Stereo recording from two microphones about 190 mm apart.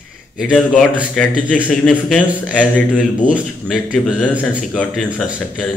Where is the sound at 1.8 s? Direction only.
5° left (ahead or behind).